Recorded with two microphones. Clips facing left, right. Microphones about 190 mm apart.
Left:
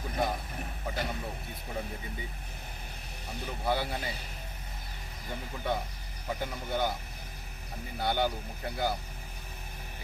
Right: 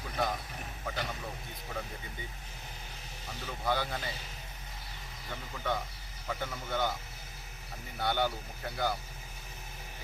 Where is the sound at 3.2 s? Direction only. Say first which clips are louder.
Left 2 dB; 15° left (ahead or behind).